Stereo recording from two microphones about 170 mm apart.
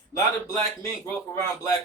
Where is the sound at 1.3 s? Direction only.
15° left (ahead or behind).